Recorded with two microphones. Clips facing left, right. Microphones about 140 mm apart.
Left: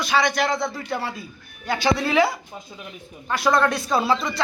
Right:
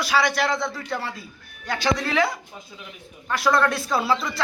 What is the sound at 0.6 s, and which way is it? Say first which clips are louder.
Speech: left 2 dB; 25° left (ahead or behind).